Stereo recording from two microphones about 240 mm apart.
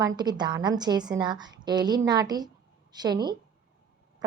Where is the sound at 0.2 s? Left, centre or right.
Centre.